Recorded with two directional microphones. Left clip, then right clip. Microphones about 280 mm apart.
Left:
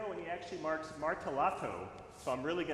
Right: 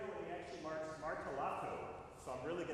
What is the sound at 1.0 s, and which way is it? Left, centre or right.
Speech, left.